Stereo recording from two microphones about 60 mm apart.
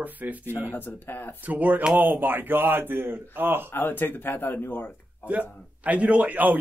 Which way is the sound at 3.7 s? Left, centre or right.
Left.